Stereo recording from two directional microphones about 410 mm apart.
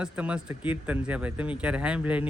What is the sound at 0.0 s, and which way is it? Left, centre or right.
Speech, centre.